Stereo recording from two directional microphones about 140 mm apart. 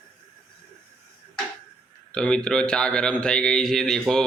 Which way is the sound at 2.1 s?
5° left (ahead or behind).